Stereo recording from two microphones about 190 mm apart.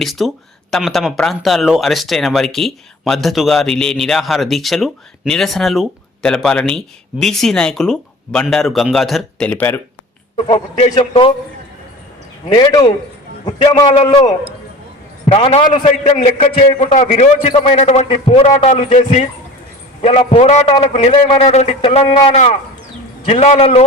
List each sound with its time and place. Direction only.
0.0 s speech: centre (ahead or behind)
10.3 s a man's voice: 35° left (ahead or behind)
12.5 s a man's voice: 25° left (ahead or behind)